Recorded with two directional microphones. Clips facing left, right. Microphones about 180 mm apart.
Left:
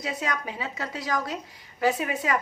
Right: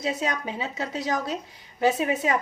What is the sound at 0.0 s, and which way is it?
Speech, 25° right (ahead or behind).